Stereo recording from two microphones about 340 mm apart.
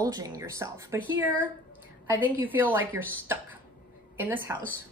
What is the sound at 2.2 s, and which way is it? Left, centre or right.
A woman's voice, centre.